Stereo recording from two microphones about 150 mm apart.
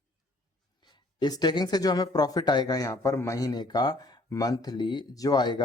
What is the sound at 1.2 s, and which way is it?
Speech, 30° left (ahead or behind).